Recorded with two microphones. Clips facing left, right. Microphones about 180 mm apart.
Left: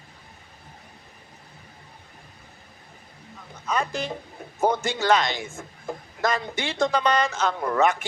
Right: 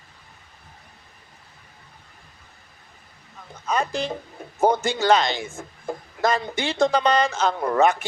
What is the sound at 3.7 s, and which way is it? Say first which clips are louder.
A man's voice: right 2 dB; 30° right (ahead or behind).